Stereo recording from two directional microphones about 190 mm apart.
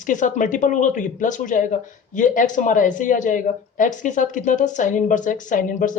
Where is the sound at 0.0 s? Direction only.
40° left (ahead or behind).